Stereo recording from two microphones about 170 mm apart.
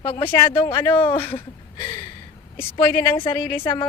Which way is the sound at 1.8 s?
25° left (ahead or behind).